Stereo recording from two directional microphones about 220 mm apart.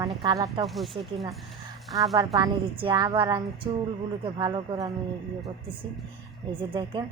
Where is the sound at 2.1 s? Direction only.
15° right (ahead or behind).